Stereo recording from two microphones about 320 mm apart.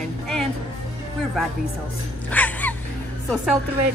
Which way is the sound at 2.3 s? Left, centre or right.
Centre.